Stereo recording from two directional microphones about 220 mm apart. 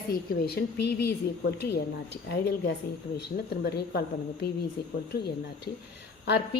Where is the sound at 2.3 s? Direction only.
50° left (ahead or behind).